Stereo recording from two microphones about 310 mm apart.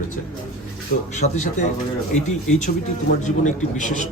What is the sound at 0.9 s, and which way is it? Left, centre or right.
Speech, left.